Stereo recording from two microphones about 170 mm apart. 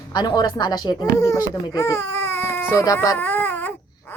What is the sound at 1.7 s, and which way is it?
Baby cry, 20° left (ahead or behind).